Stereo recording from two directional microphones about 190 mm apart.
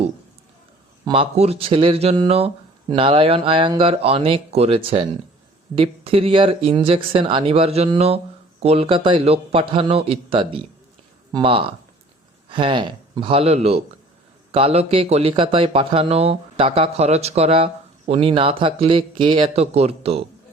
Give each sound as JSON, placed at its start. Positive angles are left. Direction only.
{"t": 1.0, "sound": "speech", "side_deg": -30}